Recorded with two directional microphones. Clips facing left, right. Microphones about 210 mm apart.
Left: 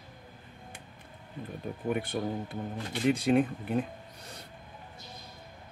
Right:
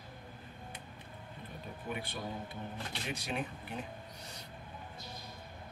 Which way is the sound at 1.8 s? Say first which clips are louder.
Left 10 dB; 50° left (ahead or behind).